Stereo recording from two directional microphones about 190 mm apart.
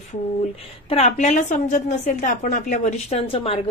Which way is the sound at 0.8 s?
35° left (ahead or behind).